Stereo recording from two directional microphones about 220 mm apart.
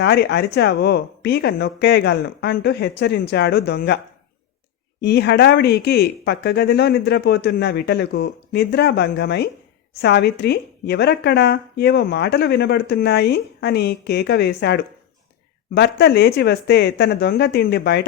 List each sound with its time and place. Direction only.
0.0 s speech: 50° left (ahead or behind)
4.9 s speech: 50° left (ahead or behind)